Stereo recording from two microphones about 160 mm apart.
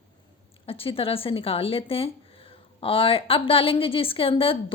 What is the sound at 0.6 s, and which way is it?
Speech, 35° left (ahead or behind).